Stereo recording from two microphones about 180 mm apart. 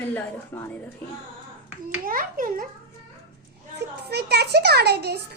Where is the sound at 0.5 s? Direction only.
10° left (ahead or behind).